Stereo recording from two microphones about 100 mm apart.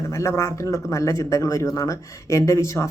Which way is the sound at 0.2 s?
30° left (ahead or behind).